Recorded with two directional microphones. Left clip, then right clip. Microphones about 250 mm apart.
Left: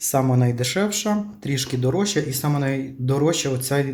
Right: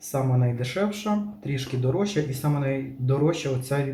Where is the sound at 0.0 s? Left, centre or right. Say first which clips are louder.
Left 7 dB; left.